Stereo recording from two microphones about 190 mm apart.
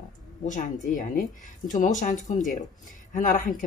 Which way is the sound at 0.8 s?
45° left (ahead or behind).